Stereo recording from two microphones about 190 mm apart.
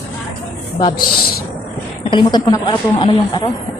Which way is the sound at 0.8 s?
20° left (ahead or behind).